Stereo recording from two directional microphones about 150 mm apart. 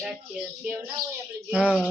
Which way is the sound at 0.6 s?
15° right (ahead or behind).